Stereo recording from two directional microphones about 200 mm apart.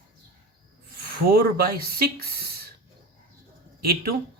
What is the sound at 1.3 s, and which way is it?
Speech, 50° right (ahead or behind).